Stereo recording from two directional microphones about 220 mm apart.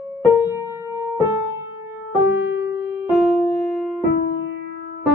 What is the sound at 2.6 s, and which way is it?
Keyboard, 10° right (ahead or behind).